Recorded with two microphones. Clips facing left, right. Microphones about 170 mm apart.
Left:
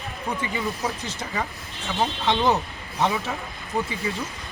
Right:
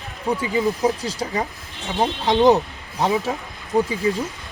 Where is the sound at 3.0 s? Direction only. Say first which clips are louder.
Right 4 dB; 35° right (ahead or behind).